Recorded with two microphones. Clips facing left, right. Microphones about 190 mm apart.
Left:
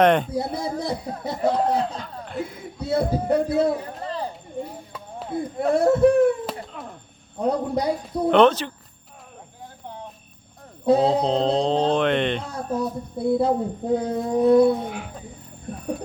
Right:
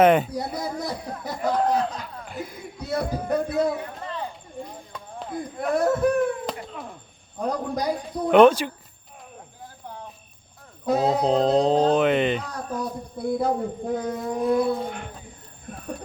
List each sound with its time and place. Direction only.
0.0 s speech: 5° right (ahead or behind)
0.3 s music: 25° left (ahead or behind)
2.0 s a sound: 5° right (ahead or behind)
2.8 s a man's voice: 25° left (ahead or behind)
4.6 s chop: 5° left (ahead or behind)
5.3 s music: 30° left (ahead or behind)
6.4 s a sound: centre (ahead or behind)
7.3 s music: 25° left (ahead or behind)
8.3 s speech: 10° right (ahead or behind)
10.8 s music: 30° left (ahead or behind)
11.2 s speech: 5° right (ahead or behind)
12.5 s music: 25° left (ahead or behind)
14.8 s speech: 5° left (ahead or behind)